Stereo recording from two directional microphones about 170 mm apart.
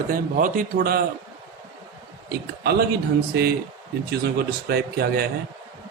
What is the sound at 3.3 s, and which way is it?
A man's voice, 75° right (ahead or behind).